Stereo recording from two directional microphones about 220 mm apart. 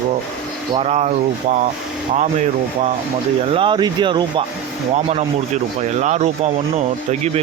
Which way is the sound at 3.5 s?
20° right (ahead or behind).